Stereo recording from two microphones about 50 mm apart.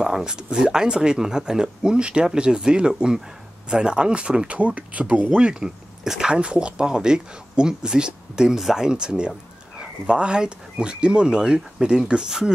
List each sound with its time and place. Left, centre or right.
0.0 s speech: centre